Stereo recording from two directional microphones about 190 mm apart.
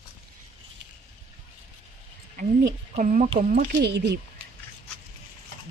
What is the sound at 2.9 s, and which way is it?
Speech, 40° right (ahead or behind).